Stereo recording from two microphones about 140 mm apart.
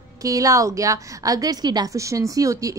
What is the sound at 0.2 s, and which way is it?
A woman's voice, 25° right (ahead or behind).